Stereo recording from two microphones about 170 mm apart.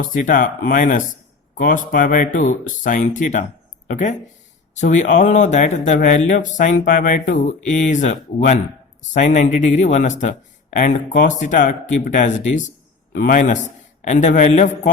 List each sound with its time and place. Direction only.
0.0 s speech: 50° left (ahead or behind)